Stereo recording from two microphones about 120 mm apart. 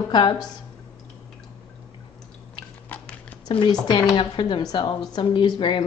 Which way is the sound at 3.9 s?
40° left (ahead or behind).